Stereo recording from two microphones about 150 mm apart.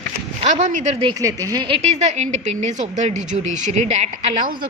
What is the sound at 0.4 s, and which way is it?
Speech, 55° right (ahead or behind).